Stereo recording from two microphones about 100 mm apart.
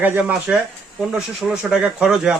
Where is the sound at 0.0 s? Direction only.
15° right (ahead or behind).